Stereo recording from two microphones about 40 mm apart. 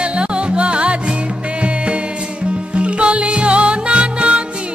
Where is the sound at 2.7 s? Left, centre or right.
Right.